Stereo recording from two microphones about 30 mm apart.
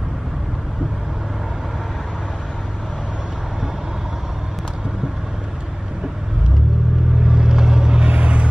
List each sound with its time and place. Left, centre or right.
7.2 s vehicle: right
8.1 s vehicle: right